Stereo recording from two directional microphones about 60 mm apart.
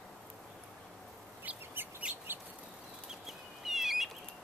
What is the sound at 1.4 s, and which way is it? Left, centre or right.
Chicken, right.